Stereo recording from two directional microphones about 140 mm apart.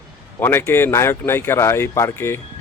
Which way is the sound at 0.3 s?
20° left (ahead or behind).